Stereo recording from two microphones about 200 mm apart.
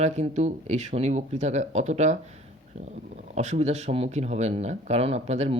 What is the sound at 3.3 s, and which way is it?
Speech, 35° right (ahead or behind).